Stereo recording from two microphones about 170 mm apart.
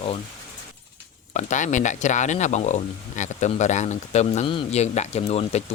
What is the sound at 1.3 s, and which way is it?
Speech, 45° left (ahead or behind).